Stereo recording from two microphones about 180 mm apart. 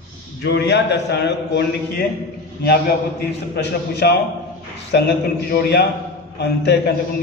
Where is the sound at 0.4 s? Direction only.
70° left (ahead or behind).